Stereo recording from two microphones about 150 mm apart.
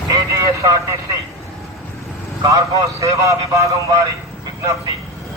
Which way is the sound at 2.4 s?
25° right (ahead or behind).